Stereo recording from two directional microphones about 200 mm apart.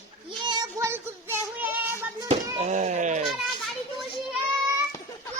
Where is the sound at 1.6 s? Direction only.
10° right (ahead or behind).